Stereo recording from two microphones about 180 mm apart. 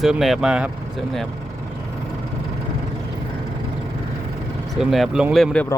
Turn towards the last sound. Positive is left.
turn(degrees=0)  # may be behind; listen again after turning